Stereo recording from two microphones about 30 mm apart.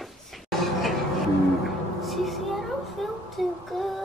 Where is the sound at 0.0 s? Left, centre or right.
Centre.